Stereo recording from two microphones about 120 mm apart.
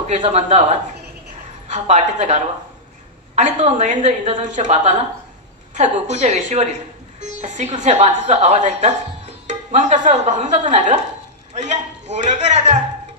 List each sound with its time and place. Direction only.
0.3 s a woman's voice: 70° right (ahead or behind); by 4.9 s 85° right
5.8 s a woman's voice: 75° right (ahead or behind)